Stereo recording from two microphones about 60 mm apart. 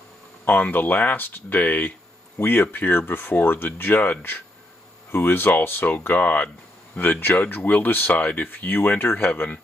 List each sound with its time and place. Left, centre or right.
0.5 s speech: left